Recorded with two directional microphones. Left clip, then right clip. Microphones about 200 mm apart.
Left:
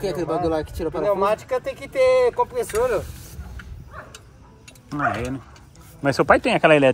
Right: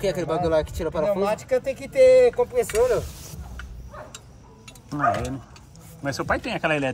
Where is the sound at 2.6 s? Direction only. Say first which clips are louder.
Right 1 dB; centre (ahead or behind).